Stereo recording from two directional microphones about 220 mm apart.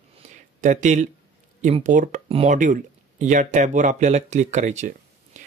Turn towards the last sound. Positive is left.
turn(degrees=-35)  # may be behind; listen again after turning